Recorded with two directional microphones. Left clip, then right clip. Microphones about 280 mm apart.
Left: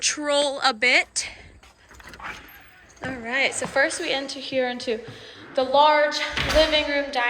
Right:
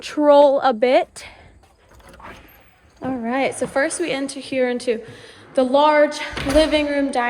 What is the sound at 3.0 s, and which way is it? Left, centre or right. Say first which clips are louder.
A woman's voice: right 2 dB; centre.